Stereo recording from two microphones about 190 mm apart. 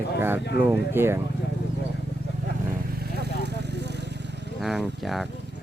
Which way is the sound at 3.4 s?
60° right (ahead or behind).